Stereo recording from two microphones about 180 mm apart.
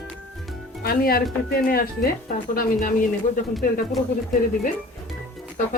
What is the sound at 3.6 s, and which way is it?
Speech, 50° left (ahead or behind).